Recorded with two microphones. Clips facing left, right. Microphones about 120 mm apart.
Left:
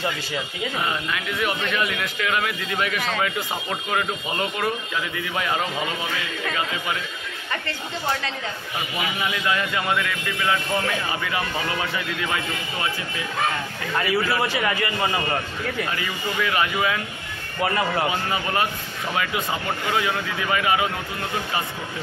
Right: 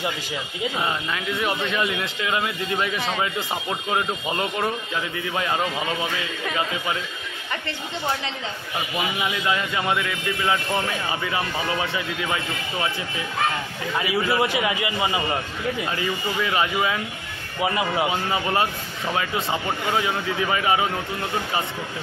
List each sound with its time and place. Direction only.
0.7 s speech: 25° right (ahead or behind)
9.2 s speech: 20° right (ahead or behind)
13.9 s a man's voice: 15° right (ahead or behind)
16.0 s speech: 25° right (ahead or behind)
17.6 s a man's voice: 5° right (ahead or behind)
18.3 s speech: 25° right (ahead or behind)
19.9 s speech: 25° right (ahead or behind)